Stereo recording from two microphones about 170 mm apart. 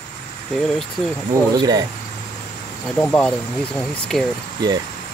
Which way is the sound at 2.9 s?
5° left (ahead or behind).